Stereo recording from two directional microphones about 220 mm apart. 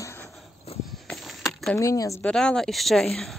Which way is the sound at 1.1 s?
Centre (ahead or behind).